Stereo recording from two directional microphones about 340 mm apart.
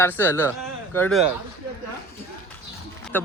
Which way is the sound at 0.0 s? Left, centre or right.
Centre.